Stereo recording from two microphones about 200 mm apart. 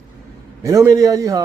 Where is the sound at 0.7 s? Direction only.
15° right (ahead or behind).